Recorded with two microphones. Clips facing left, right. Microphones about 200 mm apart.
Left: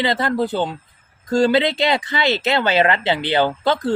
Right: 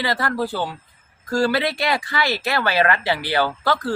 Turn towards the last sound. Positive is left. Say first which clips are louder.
# left 3 dB
turn(degrees=20)  # may be behind; listen again after turning